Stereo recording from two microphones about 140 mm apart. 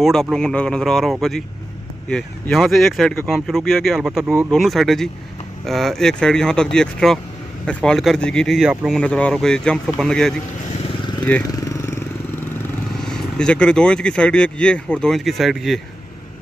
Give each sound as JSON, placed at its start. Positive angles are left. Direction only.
{"t": 0.0, "sound": "speech", "side_deg": 0}
{"t": 9.0, "sound": "speech", "side_deg": 5}
{"t": 11.5, "sound": "vehicle", "side_deg": 25}
{"t": 13.0, "sound": "speech", "side_deg": 5}